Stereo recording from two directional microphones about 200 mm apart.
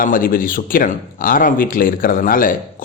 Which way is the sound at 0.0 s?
45° left (ahead or behind).